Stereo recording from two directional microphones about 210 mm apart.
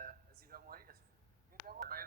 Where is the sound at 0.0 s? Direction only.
45° right (ahead or behind).